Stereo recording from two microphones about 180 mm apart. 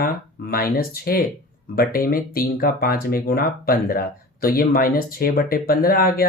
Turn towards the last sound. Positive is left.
turn(degrees=55)  # may be behind; listen again after turning